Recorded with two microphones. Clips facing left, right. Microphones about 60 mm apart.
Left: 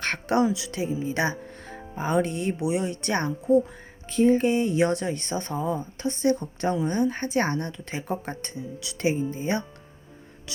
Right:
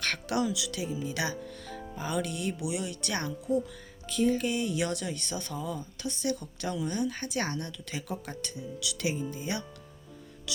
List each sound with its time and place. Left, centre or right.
0.0 s speech: left